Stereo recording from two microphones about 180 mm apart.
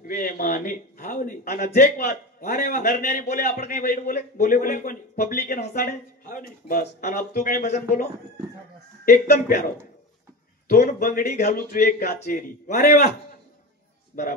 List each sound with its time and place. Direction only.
0.0 s a man's voice: 50° left (ahead or behind)
7.6 s speech: 40° left (ahead or behind)
9.0 s speech: 55° left (ahead or behind)
10.9 s a man's voice: 50° left (ahead or behind)
14.2 s a man's voice: 50° left (ahead or behind)